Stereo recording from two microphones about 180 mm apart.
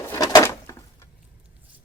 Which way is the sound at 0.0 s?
20° left (ahead or behind).